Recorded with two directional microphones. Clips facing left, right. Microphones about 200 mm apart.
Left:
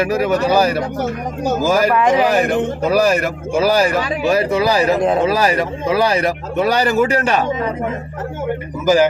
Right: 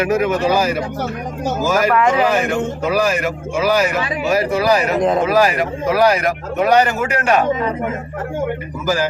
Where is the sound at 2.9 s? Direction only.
40° left (ahead or behind).